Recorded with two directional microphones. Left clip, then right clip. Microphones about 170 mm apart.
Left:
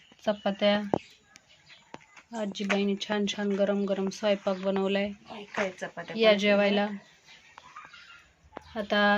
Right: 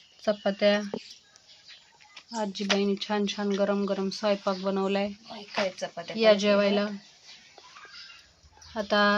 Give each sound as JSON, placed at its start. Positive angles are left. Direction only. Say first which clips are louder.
{"t": 0.3, "sound": "speech", "louder": "right 2 dB", "side_deg": 5}
{"t": 2.3, "sound": "speech", "louder": "right 2 dB", "side_deg": 5}
{"t": 5.3, "sound": "speech", "louder": "right 2 dB", "side_deg": -20}
{"t": 6.1, "sound": "speech", "louder": "right 1 dB", "side_deg": 0}
{"t": 8.7, "sound": "speech", "louder": "right 1 dB", "side_deg": 5}